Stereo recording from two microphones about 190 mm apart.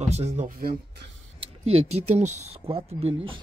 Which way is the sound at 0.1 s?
35° right (ahead or behind).